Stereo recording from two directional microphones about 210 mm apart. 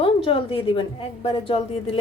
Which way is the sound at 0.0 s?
25° left (ahead or behind).